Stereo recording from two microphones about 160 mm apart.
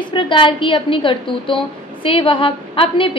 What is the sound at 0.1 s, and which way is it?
A woman's voice, 30° left (ahead or behind).